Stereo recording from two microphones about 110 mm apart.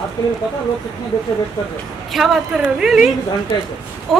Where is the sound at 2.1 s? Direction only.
Centre (ahead or behind).